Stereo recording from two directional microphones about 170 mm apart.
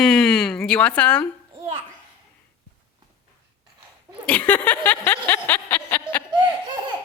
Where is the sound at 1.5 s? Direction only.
35° right (ahead or behind).